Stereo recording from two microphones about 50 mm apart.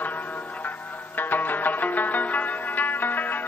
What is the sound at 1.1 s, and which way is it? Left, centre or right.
Zither, left.